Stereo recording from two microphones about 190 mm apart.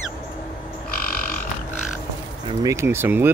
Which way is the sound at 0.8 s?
50° left (ahead or behind).